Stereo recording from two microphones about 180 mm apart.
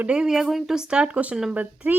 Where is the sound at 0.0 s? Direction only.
5° right (ahead or behind).